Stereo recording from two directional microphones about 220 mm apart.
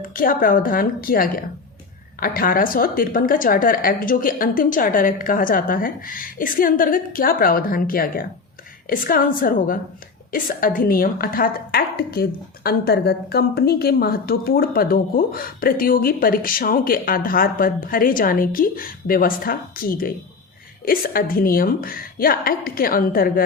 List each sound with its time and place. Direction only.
0.1 s a woman's voice: 40° left (ahead or behind)